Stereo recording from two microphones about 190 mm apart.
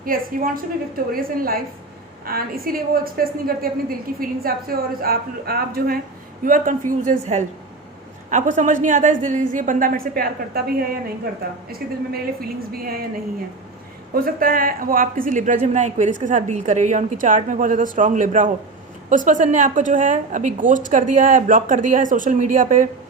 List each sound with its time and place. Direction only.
0.0 s a woman's voice: 50° right (ahead or behind)